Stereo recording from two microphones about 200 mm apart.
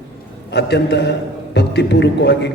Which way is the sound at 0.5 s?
60° left (ahead or behind).